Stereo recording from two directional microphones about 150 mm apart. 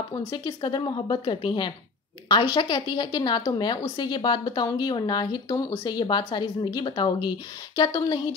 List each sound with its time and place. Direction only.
0.1 s speech: 30° left (ahead or behind)